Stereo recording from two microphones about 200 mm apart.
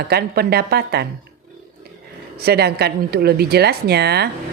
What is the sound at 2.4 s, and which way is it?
A woman's voice, 55° right (ahead or behind).